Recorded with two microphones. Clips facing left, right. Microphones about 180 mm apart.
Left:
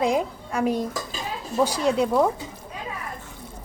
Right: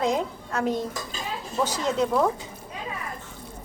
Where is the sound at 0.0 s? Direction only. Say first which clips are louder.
Left 2 dB; 10° left (ahead or behind).